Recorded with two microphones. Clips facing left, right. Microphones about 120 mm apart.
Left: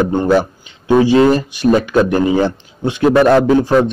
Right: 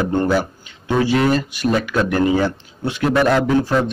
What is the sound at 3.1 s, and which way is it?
Speech, 35° left (ahead or behind).